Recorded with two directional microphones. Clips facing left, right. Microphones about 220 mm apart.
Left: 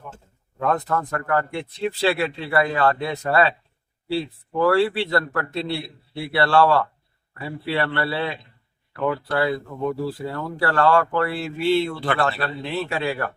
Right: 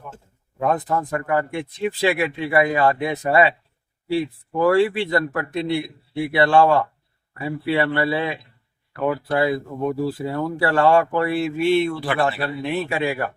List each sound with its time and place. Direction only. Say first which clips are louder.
0.6 s speech: right 1 dB; 15° right (ahead or behind)